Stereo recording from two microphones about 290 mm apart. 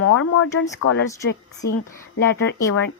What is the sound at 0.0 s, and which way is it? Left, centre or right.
Speech, left.